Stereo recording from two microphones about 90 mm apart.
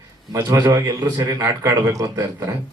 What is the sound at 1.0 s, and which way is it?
A man's voice, 45° right (ahead or behind).